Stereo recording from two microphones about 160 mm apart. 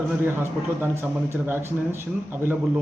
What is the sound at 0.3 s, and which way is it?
Speech, 15° right (ahead or behind).